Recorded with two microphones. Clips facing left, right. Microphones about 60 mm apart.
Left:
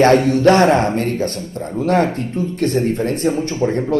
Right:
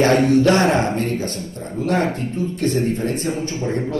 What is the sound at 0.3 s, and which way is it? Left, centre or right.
A man's voice, left.